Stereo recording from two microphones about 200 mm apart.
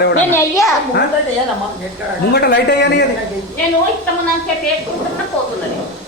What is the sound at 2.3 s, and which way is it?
Speech, 55° left (ahead or behind).